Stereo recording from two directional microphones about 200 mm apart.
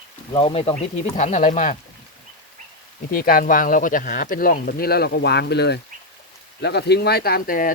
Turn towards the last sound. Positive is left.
turn(degrees=45)  # may be behind; listen again after turning